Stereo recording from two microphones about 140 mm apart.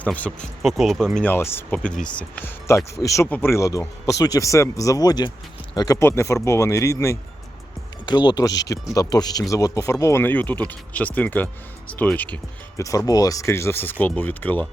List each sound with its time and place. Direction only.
0.0 s speech: 10° left (ahead or behind)
1.1 s speech: 10° left (ahead or behind)
8.0 s speech: 30° left (ahead or behind); by 12.8 s 10° left (ahead or behind)
13.1 s speech: 25° left (ahead or behind)